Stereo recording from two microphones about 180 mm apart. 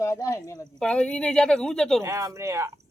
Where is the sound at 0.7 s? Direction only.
5° left (ahead or behind).